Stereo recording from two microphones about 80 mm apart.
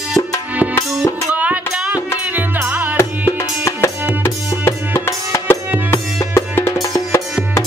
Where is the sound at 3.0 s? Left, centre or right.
Left.